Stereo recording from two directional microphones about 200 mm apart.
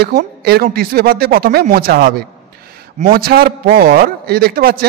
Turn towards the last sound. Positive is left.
turn(degrees=-45)  # may be behind; listen again after turning